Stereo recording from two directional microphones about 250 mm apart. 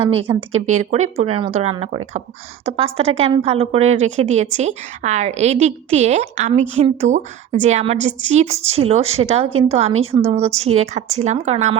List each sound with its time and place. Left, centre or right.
0.1 s a woman's voice: right